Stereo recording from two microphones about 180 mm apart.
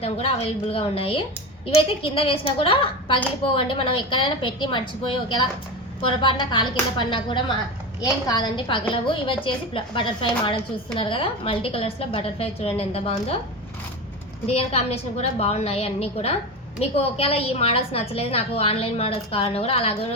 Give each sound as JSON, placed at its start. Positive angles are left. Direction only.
{"t": 0.0, "sound": "a woman's voice", "side_deg": 35}
{"t": 14.4, "sound": "a woman's voice", "side_deg": 35}